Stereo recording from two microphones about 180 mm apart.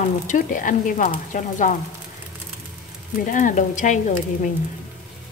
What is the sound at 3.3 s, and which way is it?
Speech, 45° left (ahead or behind).